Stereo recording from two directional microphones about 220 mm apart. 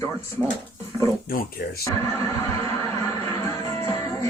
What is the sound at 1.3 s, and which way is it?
Speech, 40° left (ahead or behind).